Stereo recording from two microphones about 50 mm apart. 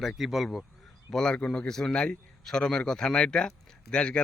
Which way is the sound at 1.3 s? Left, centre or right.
Centre.